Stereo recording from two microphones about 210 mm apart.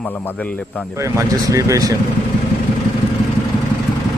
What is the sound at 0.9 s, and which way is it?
Speech, 15° right (ahead or behind).